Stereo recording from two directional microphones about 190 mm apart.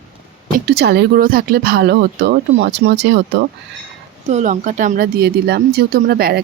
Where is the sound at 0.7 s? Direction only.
60° right (ahead or behind).